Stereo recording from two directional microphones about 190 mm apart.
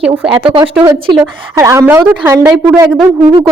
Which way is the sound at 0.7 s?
5° right (ahead or behind).